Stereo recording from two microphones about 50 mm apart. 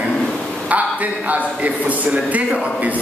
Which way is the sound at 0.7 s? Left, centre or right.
Right.